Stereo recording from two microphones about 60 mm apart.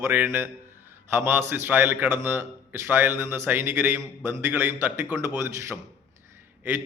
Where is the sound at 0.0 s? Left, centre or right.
Right.